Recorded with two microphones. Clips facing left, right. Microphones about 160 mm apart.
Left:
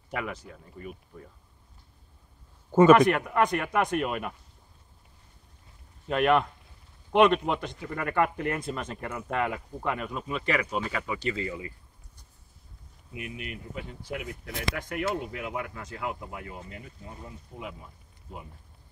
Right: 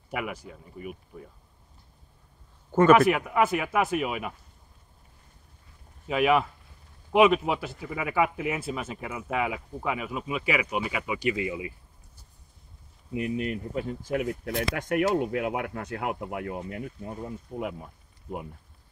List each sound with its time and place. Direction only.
0.1 s speech: 10° right (ahead or behind)
2.9 s speech: 5° right (ahead or behind)
6.0 s speech: 5° right (ahead or behind)
13.1 s speech: 35° right (ahead or behind); by 16.8 s 60° right (ahead or behind)
17.5 s speech: 15° right (ahead or behind)